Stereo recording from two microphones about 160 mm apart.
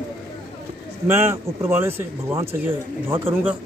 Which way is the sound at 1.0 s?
15° right (ahead or behind).